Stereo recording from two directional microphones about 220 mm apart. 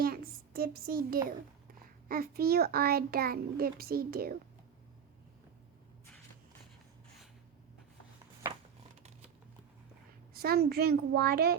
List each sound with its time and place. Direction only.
0.0 s a sound: 40° right (ahead or behind)
2.0 s a child's voice: 40° right (ahead or behind)
10.3 s a child's voice: 45° right (ahead or behind)